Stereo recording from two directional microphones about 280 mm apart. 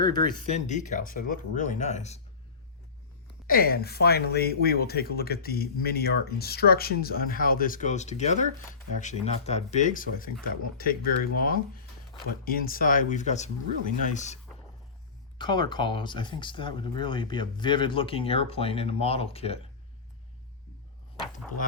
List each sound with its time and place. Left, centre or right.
0.0 s speech: centre
3.4 s speech: left
15.4 s speech: centre
21.6 s speech: left